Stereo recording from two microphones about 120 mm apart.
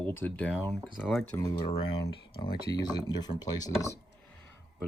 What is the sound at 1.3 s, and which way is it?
Speech, 30° left (ahead or behind).